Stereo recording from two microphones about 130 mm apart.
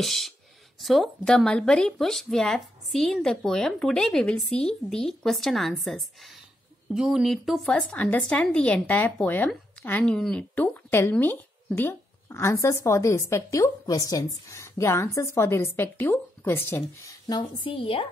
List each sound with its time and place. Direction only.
0.0 s speech: centre (ahead or behind)
17.3 s speech: 40° left (ahead or behind)